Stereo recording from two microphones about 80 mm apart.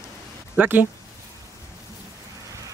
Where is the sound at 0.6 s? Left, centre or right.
Right.